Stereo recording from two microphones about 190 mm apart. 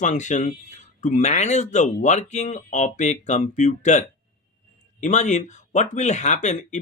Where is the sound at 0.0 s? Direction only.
40° left (ahead or behind).